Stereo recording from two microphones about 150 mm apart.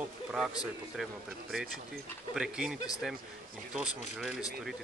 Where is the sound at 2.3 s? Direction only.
5° right (ahead or behind).